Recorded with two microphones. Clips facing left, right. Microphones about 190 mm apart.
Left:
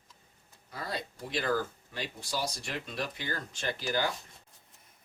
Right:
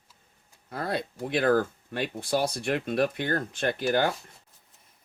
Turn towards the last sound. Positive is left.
turn(degrees=-60)  # may be behind; listen again after turning